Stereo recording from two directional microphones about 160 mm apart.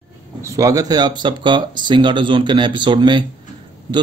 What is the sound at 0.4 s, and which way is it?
A man's voice, 20° right (ahead or behind).